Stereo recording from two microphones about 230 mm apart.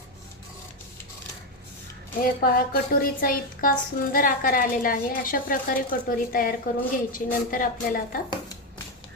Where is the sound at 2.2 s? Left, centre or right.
Left.